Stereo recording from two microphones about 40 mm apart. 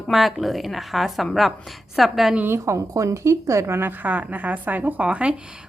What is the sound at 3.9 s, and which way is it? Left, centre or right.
A woman's voice, right.